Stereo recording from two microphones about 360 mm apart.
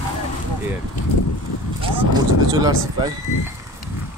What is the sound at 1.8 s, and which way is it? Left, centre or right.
Speech, centre.